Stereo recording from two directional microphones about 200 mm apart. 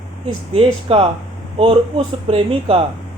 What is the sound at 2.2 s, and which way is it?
Speech, 30° right (ahead or behind).